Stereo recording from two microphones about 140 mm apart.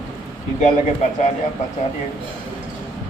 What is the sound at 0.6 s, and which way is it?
Speech, 55° left (ahead or behind).